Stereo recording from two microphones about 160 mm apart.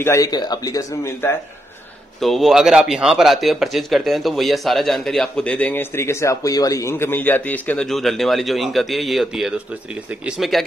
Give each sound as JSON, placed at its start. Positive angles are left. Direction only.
{"t": 0.0, "sound": "speech", "side_deg": 20}
{"t": 2.1, "sound": "speech", "side_deg": 0}